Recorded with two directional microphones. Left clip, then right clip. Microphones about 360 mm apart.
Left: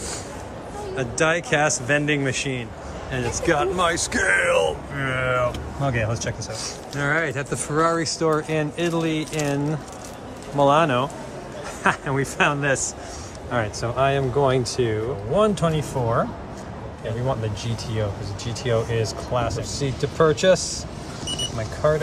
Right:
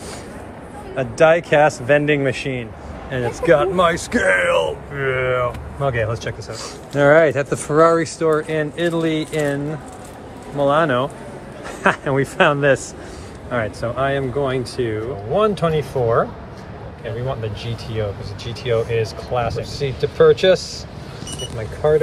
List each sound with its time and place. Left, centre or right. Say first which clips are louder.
0.9 s speech: right 8 dB; centre
10.6 s speech: right 1 dB; centre
18.7 s speech: right 4 dB; centre